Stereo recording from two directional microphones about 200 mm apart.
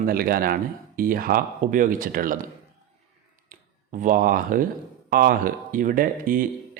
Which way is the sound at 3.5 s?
40° right (ahead or behind).